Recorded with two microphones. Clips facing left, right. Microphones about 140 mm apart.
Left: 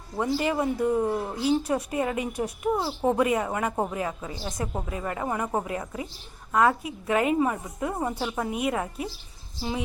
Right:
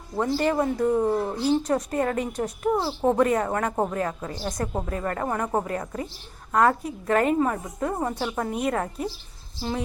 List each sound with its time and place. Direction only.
0.2 s a woman's voice: 5° left (ahead or behind)